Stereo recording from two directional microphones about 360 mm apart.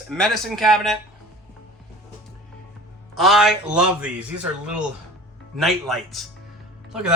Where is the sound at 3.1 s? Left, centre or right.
Centre.